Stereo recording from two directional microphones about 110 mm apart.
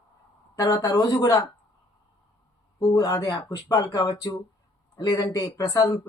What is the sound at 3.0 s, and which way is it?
Speech, 35° left (ahead or behind).